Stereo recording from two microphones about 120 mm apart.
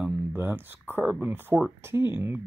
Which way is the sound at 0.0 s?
15° right (ahead or behind).